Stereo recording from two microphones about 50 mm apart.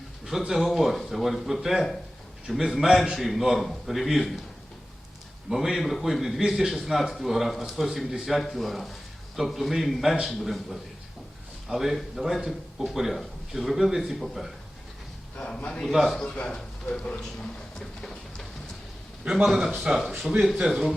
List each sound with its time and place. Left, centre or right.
0.3 s speech: centre
5.5 s speech: centre
15.4 s a man's voice: centre
17.7 s music: centre
19.5 s speech: centre